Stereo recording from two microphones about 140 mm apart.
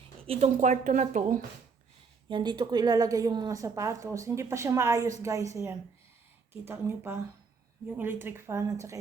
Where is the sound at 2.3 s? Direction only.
35° right (ahead or behind).